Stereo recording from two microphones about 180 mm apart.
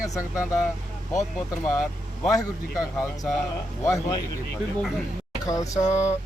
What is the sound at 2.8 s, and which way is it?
Speech, 20° left (ahead or behind).